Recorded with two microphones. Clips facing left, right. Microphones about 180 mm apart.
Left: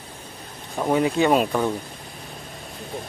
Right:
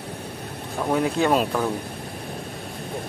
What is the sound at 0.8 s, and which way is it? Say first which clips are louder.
Speech: left 2 dB; 10° left (ahead or behind).